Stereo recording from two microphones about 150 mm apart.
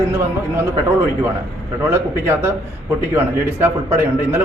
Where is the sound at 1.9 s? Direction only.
15° right (ahead or behind).